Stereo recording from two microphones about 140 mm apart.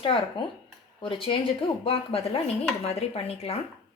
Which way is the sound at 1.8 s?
45° left (ahead or behind).